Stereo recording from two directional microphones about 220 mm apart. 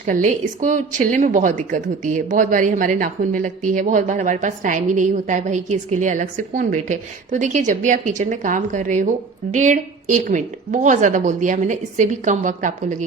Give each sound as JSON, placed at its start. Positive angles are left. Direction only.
{"t": 0.0, "sound": "a woman's voice", "side_deg": -35}